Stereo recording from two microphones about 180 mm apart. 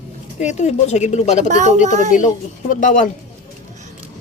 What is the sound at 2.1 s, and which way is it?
Speech, 45° left (ahead or behind).